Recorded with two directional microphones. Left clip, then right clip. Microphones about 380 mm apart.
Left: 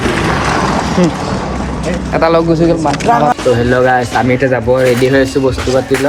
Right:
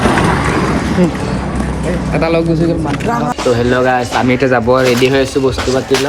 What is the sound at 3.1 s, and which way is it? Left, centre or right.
Speech, centre.